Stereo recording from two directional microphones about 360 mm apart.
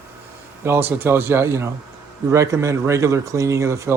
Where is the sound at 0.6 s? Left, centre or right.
Centre.